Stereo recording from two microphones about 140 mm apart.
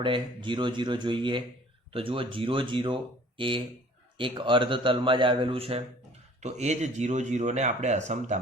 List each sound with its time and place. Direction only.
0.0 s speech: 35° right (ahead or behind)
6.4 s speech: 55° right (ahead or behind)